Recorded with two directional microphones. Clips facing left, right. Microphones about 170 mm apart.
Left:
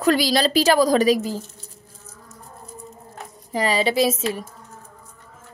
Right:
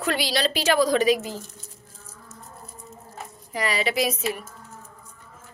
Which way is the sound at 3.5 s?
30° left (ahead or behind).